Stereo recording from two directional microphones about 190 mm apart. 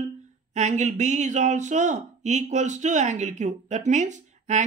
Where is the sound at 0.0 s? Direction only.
40° right (ahead or behind).